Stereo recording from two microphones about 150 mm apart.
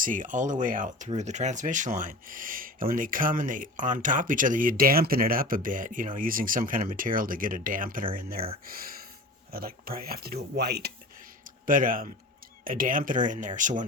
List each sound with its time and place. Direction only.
0.0 s speech: 60° right (ahead or behind)
9.5 s speech: 80° right
11.6 s speech: 65° right (ahead or behind)